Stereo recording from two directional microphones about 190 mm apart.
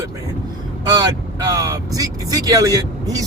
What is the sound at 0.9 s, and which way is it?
Vehicle, 20° right (ahead or behind).